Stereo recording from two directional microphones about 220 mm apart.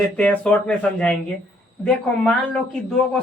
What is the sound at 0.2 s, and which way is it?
Speech, 5° left (ahead or behind).